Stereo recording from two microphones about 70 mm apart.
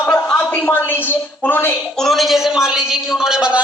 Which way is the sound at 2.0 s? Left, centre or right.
Centre.